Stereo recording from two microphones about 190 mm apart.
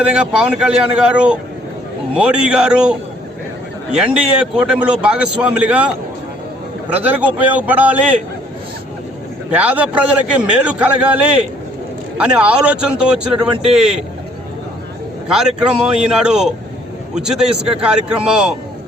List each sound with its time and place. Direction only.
0.0 s a man's voice: 5° right (ahead or behind)
6.9 s a man's voice: 10° right (ahead or behind)
9.5 s a man's voice: 10° right (ahead or behind)
13.5 s a man's voice: 30° right (ahead or behind)
13.7 s a man's voice: 5° right (ahead or behind)
15.3 s a man's voice: 5° right (ahead or behind)